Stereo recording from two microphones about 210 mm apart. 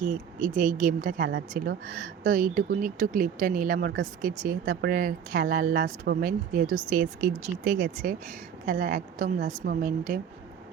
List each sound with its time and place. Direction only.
0.0 s speech: 40° right (ahead or behind)